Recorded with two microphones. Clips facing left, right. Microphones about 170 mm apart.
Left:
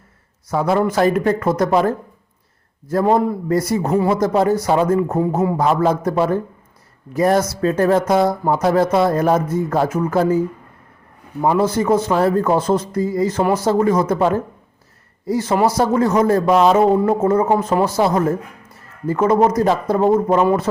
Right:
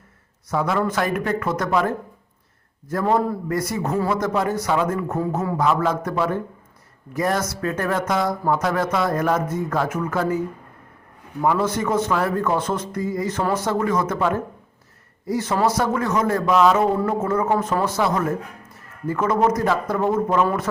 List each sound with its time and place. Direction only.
0.5 s speech: 30° left (ahead or behind)
5.5 s speech: 35° left (ahead or behind)
11.6 s speech: 35° left (ahead or behind)